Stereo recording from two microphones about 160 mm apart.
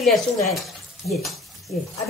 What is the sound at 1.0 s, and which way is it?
Speech, 80° left.